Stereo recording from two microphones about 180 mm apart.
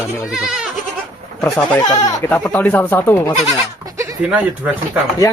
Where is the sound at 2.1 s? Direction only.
20° left (ahead or behind).